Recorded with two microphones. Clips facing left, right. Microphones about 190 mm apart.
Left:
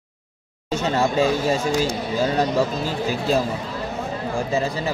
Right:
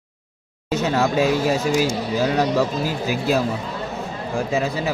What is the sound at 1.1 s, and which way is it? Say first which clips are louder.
A man's voice: right 1 dB; 10° right (ahead or behind).